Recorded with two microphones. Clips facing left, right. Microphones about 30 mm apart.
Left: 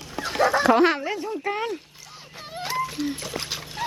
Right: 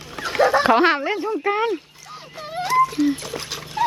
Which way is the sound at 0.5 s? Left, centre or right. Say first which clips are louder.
Right 1 dB; right.